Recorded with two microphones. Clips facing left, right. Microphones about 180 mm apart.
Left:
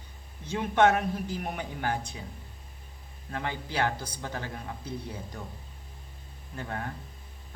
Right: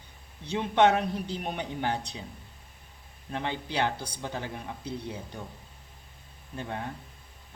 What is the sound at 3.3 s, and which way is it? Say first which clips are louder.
Speech: right 1 dB; 20° right (ahead or behind).